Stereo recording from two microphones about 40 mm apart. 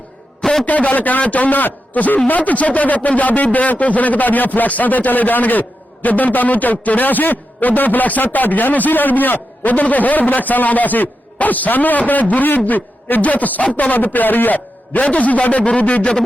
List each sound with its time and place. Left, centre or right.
0.6 s a man's voice: left
15.1 s a man's voice: left